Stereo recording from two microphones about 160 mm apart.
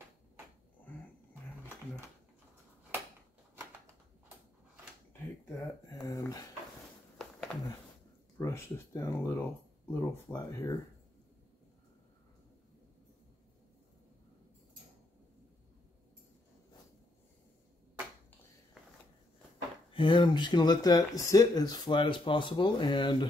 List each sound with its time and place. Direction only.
5.6 s speech: 25° left (ahead or behind)
7.5 s a sound: 5° left (ahead or behind)
8.4 s speech: 15° left (ahead or behind)
19.9 s speech: 30° left (ahead or behind)